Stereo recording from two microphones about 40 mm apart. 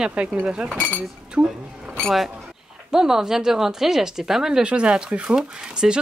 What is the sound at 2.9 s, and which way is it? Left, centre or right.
Speech, centre.